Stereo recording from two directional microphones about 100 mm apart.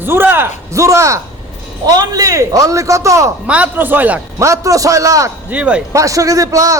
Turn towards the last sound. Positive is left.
turn(degrees=-35)  # may be behind; listen again after turning